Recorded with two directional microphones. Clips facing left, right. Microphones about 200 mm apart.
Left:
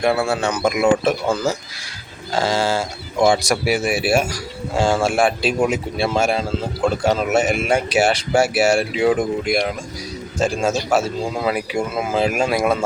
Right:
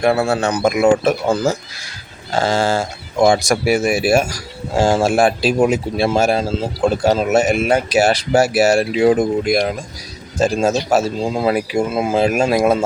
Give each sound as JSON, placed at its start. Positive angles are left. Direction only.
{"t": 0.0, "sound": "speech", "side_deg": -40}